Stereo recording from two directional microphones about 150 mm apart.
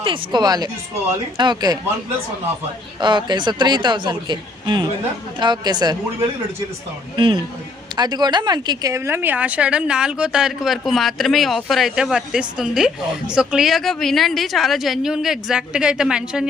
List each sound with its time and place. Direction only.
0.0 s speech: 35° right (ahead or behind)
3.0 s speech: 30° right (ahead or behind)
7.2 s speech: 35° right (ahead or behind); by 16.5 s 5° right (ahead or behind)